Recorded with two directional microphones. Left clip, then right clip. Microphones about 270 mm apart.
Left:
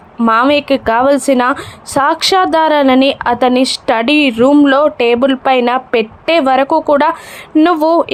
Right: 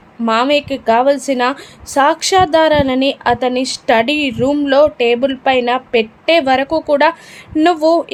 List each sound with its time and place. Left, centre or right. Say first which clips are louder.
0.3 s a woman's voice: left 4 dB; centre